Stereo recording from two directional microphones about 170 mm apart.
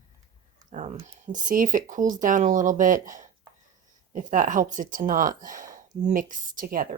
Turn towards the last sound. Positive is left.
turn(degrees=-55)  # may be behind; listen again after turning